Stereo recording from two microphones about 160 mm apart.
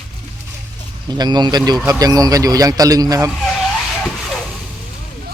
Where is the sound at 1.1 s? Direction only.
25° right (ahead or behind).